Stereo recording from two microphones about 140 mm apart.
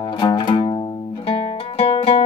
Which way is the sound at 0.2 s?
35° left (ahead or behind).